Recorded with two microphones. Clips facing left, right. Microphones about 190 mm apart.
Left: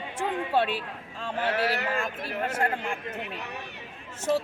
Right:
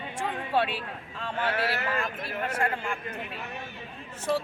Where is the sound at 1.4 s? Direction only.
40° left (ahead or behind).